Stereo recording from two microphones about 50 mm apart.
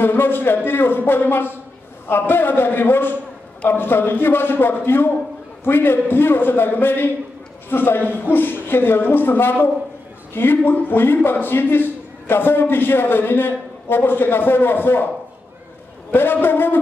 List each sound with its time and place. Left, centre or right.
0.0 s a man's voice: left
16.1 s a man's voice: left